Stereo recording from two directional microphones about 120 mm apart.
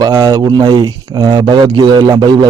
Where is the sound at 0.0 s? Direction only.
30° right (ahead or behind).